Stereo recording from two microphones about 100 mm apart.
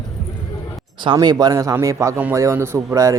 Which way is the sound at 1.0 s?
45° right (ahead or behind).